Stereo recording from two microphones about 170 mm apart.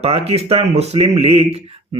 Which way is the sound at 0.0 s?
35° right (ahead or behind).